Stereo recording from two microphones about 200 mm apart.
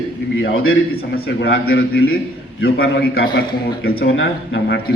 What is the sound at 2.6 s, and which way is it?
Speech, 50° left (ahead or behind).